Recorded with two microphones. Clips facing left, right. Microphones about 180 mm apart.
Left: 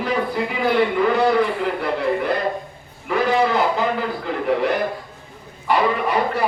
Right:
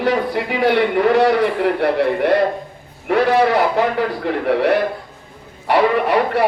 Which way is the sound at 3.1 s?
70° right (ahead or behind).